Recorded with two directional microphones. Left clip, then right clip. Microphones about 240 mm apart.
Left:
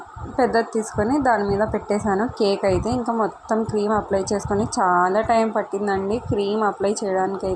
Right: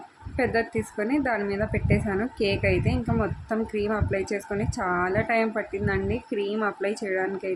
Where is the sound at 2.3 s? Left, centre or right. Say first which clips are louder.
Left 3 dB; centre.